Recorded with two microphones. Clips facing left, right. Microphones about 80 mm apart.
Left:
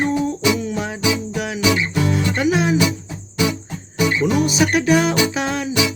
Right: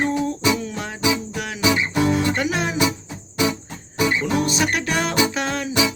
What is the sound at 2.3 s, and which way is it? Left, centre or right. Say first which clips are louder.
Music: left 5 dB; centre.